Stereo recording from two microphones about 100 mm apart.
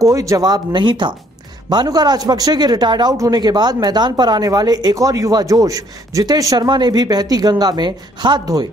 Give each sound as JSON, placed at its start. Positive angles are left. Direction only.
{"t": 0.0, "sound": "speech", "side_deg": -35}